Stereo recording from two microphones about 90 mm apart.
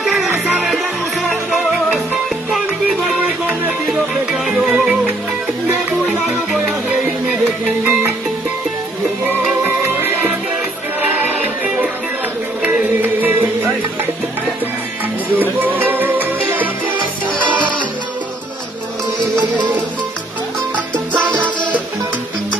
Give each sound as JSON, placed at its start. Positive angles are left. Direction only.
{"t": 0.0, "sound": "music", "side_deg": 0}
{"t": 1.3, "sound": "music", "side_deg": -5}
{"t": 3.2, "sound": "music", "side_deg": -20}
{"t": 3.9, "sound": "music", "side_deg": -5}
{"t": 7.8, "sound": "music", "side_deg": -20}
{"t": 9.2, "sound": "music", "side_deg": -20}
{"t": 15.3, "sound": "music", "side_deg": -20}
{"t": 19.1, "sound": "music", "side_deg": -55}